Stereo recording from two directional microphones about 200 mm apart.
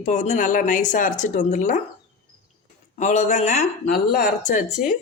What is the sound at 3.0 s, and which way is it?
Speech, 35° left (ahead or behind).